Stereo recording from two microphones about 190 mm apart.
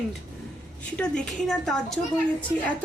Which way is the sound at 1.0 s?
5° left (ahead or behind).